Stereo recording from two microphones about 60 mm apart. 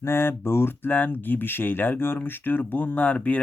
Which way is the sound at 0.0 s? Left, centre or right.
Left.